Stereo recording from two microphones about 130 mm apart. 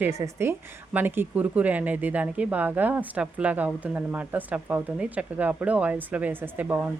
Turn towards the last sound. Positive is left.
turn(degrees=-10)  # may be behind; listen again after turning